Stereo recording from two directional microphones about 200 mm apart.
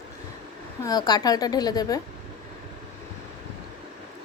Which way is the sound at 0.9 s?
20° left (ahead or behind).